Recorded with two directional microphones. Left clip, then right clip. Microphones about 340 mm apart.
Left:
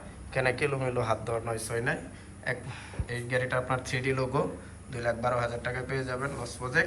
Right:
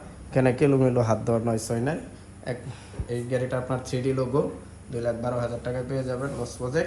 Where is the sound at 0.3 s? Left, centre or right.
Right.